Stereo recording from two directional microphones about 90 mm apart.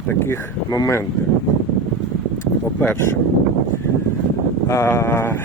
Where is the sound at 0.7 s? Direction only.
40° left (ahead or behind).